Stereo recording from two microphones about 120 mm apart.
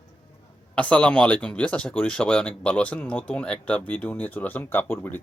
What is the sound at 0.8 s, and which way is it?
Speech, 10° left (ahead or behind).